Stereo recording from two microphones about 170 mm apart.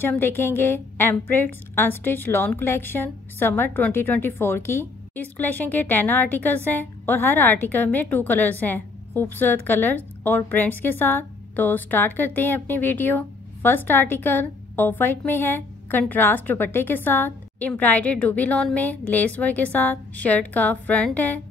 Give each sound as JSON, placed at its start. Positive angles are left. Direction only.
{"t": 0.0, "sound": "a woman's voice", "side_deg": 10}